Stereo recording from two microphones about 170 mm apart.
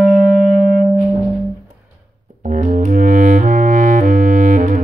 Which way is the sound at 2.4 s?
45° right (ahead or behind).